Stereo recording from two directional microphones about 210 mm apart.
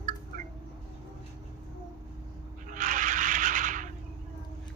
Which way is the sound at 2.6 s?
40° right (ahead or behind).